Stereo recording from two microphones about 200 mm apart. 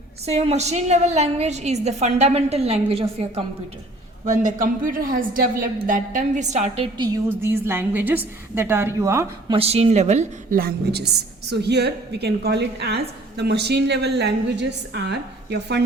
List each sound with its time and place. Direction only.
0.3 s a woman's voice: 35° right (ahead or behind)
7.3 s a woman's voice: 10° right (ahead or behind)
9.5 s a woman's voice: 30° right (ahead or behind)
10.6 s a woman's voice: 50° right (ahead or behind)